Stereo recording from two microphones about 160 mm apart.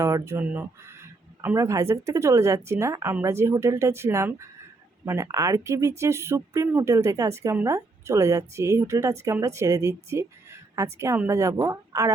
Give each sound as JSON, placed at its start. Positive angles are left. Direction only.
{"t": 0.0, "sound": "a woman's voice", "side_deg": -20}